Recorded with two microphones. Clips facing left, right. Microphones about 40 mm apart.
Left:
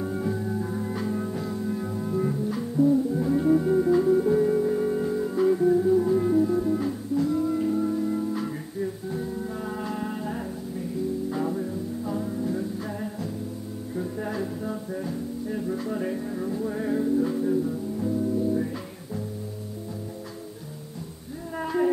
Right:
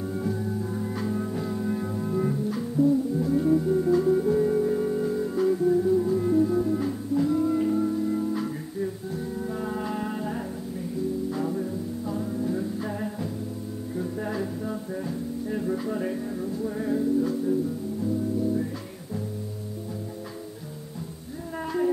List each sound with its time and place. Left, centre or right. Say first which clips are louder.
0.0 s music: left 1 dB; centre
2.8 s music: left 1 dB; centre
11.2 s music: even; centre
16.3 s music: left 1 dB; left
21.5 s music: left 2 dB; centre